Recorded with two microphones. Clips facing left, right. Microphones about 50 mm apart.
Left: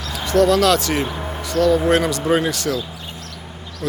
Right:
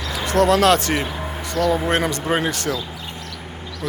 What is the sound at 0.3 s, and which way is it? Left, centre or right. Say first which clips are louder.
Speech: left 1 dB; right.